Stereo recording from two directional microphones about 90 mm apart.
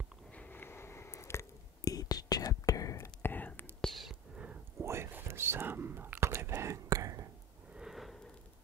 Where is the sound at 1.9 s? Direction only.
45° left (ahead or behind).